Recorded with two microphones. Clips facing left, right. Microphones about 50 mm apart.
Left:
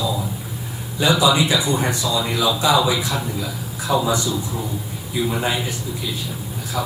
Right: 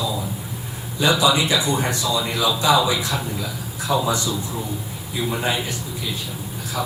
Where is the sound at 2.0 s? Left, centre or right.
Centre.